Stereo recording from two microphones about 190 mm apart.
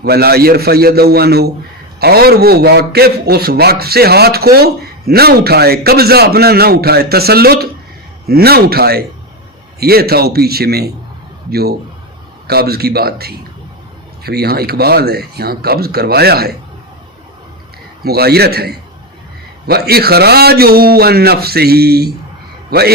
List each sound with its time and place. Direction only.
0.0 s a man's voice: 55° right (ahead or behind)
12.5 s a man's voice: 55° right (ahead or behind)
18.0 s a man's voice: 55° right (ahead or behind)